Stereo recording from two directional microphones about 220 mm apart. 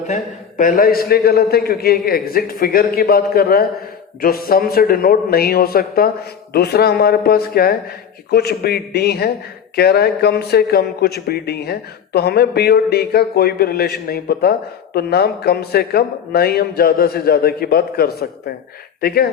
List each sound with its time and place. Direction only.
0.1 s speech: 35° left (ahead or behind)